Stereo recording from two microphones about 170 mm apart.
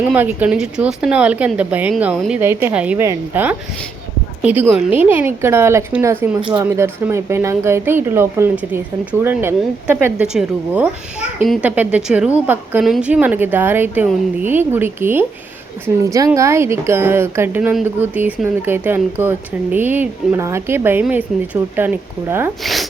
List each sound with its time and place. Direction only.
0.0 s a woman's voice: 10° right (ahead or behind)
2.4 s speech: 15° right (ahead or behind)
22.6 s a sound: centre (ahead or behind)